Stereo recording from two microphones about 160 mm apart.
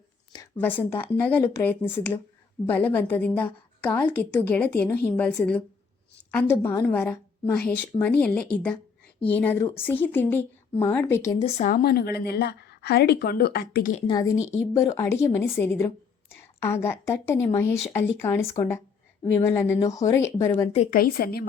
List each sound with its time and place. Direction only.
0.5 s a woman's voice: 10° left (ahead or behind)
11.3 s speech: 40° left (ahead or behind)
11.7 s a woman's voice: 70° left (ahead or behind)
14.1 s a woman's voice: 20° left (ahead or behind)
20.9 s a woman's voice: 65° left (ahead or behind)